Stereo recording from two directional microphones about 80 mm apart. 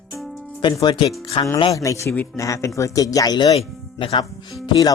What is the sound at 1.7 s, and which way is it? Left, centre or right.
Speech, left.